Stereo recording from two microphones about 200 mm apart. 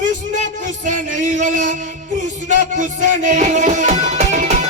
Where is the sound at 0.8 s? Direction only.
40° right (ahead or behind).